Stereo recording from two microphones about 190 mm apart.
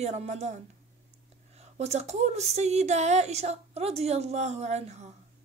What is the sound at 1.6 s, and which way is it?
Speech, 35° right (ahead or behind).